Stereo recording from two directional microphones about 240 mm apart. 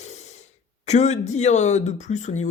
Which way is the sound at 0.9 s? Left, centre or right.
Left.